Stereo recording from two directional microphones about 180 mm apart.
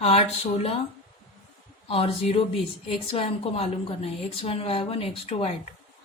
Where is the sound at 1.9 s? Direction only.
30° left (ahead or behind).